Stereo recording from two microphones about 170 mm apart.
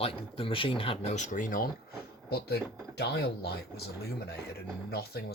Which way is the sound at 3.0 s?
75° left (ahead or behind).